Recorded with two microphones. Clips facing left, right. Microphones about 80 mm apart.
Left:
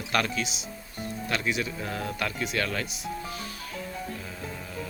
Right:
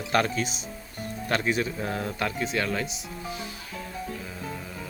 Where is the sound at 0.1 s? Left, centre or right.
Right.